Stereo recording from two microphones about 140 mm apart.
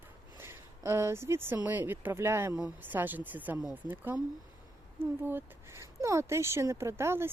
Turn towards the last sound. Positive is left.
turn(degrees=-15)  # may be behind; listen again after turning